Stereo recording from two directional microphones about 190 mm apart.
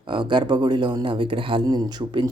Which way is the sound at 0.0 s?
25° right (ahead or behind).